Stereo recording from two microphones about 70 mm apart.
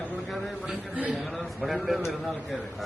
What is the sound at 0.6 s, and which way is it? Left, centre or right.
Speech, right.